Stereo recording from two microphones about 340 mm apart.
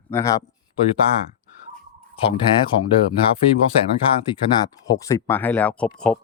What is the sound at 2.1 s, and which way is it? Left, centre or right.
Speech, centre.